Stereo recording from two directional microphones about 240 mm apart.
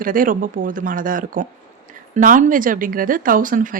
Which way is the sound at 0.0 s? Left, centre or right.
Right.